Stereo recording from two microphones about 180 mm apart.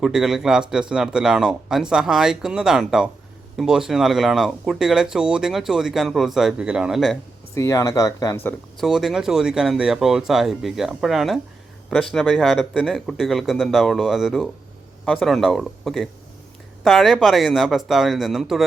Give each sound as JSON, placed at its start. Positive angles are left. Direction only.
{"t": 0.0, "sound": "speech", "side_deg": -5}
{"t": 7.5, "sound": "speech", "side_deg": 15}
{"t": 8.8, "sound": "speech", "side_deg": 0}